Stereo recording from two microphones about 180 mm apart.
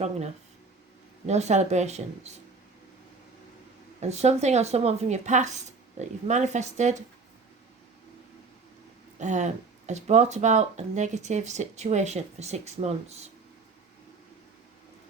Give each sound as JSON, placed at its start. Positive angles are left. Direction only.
{"t": 1.3, "sound": "speech", "side_deg": -40}
{"t": 4.0, "sound": "speech", "side_deg": -40}
{"t": 9.1, "sound": "speech", "side_deg": -40}